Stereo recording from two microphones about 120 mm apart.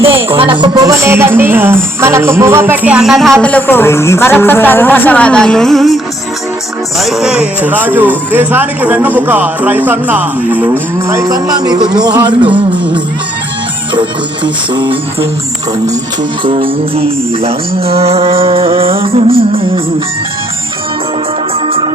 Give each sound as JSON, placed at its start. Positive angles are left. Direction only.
{"t": 0.3, "sound": "music", "side_deg": -45}
{"t": 3.4, "sound": "speech", "side_deg": 15}
{"t": 7.0, "sound": "speech", "side_deg": -5}
{"t": 11.1, "sound": "music", "side_deg": -30}
{"t": 16.4, "sound": "music", "side_deg": -45}